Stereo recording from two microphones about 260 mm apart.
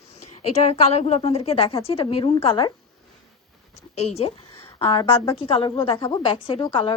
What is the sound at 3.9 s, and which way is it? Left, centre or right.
Speech, left.